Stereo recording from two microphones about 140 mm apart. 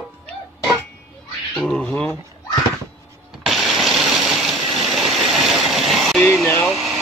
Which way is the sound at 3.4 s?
Centre (ahead or behind).